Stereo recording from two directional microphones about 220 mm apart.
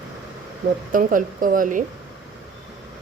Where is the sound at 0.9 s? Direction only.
40° right (ahead or behind).